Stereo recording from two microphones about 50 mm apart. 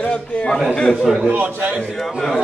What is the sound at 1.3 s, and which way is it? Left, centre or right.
Speech, right.